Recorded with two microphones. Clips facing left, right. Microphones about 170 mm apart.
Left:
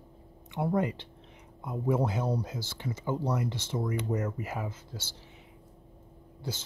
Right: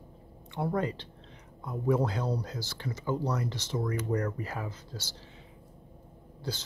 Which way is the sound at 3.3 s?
15° left (ahead or behind).